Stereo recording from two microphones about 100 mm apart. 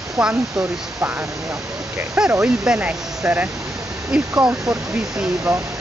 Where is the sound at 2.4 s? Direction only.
10° right (ahead or behind).